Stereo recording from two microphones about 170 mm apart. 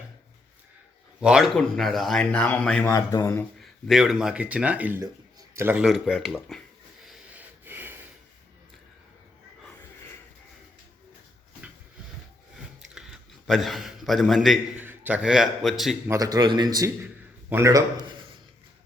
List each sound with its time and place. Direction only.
1.2 s speech: 5° right (ahead or behind)
2.9 s speech: 20° left (ahead or behind)
3.6 s speech: centre (ahead or behind)
5.8 s speech: centre (ahead or behind)
7.0 s a sound: centre (ahead or behind)
7.6 s snort: 10° right (ahead or behind)
12.9 s a sound: 5° right (ahead or behind)
14.8 s a man's voice: 10° right (ahead or behind)
16.0 s a man's voice: 20° right (ahead or behind)